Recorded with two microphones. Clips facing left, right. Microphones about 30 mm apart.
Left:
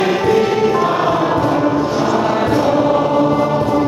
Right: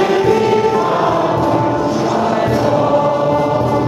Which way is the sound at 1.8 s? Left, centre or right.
Centre.